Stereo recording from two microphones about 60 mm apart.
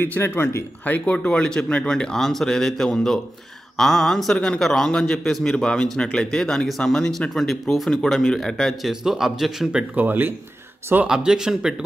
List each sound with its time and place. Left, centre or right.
0.4 s speech: left
0.8 s a man's voice: left; by 8.7 s centre
8.8 s speech: centre
9.9 s speech: right
11.1 s speech: centre